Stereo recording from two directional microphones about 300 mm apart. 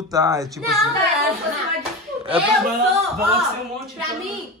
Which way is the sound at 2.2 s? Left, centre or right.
Centre.